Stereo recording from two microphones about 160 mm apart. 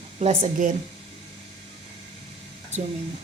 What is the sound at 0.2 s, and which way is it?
Speech, 45° right (ahead or behind).